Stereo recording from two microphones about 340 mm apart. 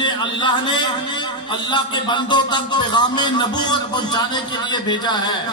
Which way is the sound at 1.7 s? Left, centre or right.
Centre.